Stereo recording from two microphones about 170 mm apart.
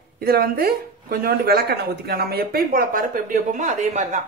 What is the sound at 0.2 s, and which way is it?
A woman's voice, 65° right (ahead or behind).